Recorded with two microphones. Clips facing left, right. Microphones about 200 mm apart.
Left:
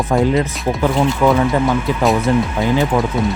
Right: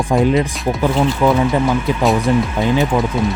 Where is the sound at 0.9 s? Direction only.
Centre (ahead or behind).